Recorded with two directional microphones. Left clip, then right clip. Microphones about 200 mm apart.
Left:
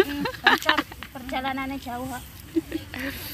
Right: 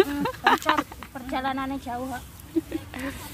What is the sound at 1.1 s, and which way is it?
Speech, 30° left (ahead or behind).